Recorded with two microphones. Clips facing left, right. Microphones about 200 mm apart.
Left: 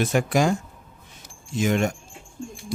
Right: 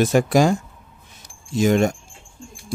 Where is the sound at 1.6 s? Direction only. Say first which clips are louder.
Right 5 dB; 35° right (ahead or behind).